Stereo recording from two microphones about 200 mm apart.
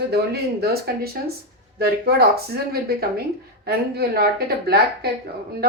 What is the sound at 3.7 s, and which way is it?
Speech, 50° right (ahead or behind).